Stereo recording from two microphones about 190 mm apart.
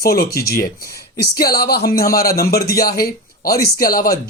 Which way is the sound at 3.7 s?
50° left (ahead or behind).